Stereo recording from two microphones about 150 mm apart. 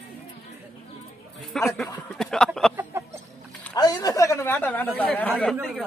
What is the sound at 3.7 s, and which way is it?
Speech, 25° left (ahead or behind).